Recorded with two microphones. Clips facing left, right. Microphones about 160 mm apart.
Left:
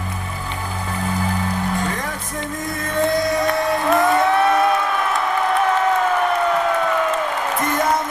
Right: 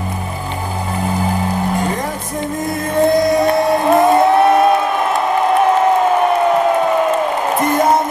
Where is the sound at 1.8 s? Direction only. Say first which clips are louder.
Right 5 dB; 30° right (ahead or behind).